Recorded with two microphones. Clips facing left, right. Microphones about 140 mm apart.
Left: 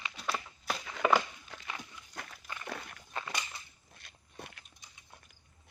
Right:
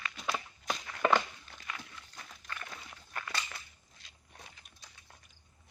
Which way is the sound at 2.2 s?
75° left (ahead or behind).